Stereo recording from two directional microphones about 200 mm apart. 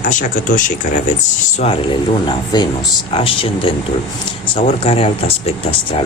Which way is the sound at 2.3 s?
20° left (ahead or behind).